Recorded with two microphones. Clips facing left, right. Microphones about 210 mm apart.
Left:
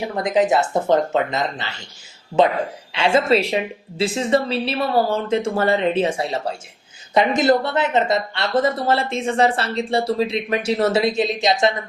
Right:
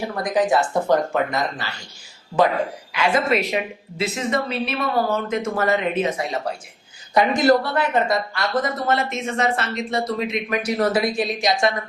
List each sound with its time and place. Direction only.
0.2 s a woman's voice: 20° left (ahead or behind)